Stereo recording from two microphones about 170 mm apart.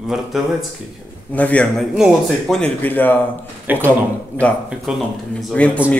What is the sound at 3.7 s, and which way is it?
Speech, 10° right (ahead or behind).